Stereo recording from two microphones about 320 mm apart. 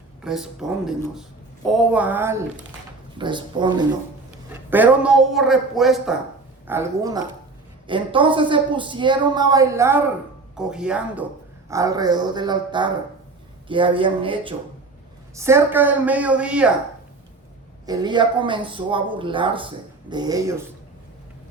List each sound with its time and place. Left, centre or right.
0.2 s speech: centre
17.8 s speech: centre